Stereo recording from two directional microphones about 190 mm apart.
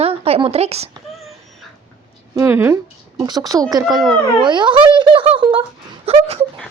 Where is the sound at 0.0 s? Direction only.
30° right (ahead or behind).